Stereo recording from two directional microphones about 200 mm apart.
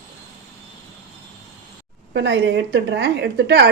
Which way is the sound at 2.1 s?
60° right (ahead or behind).